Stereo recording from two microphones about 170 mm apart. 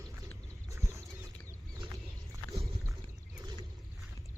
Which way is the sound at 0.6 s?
20° right (ahead or behind).